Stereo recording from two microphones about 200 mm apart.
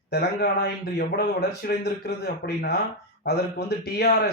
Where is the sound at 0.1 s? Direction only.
50° left (ahead or behind).